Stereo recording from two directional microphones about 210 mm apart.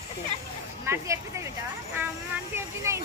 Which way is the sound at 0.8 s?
10° right (ahead or behind).